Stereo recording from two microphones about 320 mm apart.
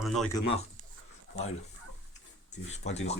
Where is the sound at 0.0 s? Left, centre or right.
Centre.